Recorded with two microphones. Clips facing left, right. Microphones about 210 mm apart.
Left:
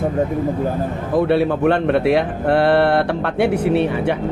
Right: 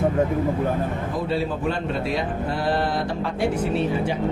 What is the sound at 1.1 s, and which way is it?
Speech, 65° left (ahead or behind).